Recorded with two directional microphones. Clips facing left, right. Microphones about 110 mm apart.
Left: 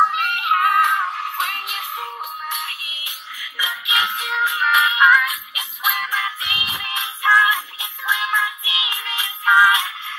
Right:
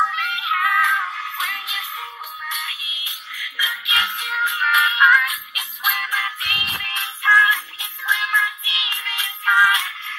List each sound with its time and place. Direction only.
0.1 s music: 55° left (ahead or behind)
0.8 s music: 30° left (ahead or behind)
2.8 s music: 45° left (ahead or behind)
3.5 s music: 25° left (ahead or behind); by 6.7 s 5° left (ahead or behind)
6.7 s music: 15° left (ahead or behind)